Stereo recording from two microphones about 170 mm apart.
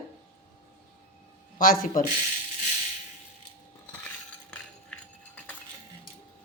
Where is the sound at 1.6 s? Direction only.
50° left (ahead or behind).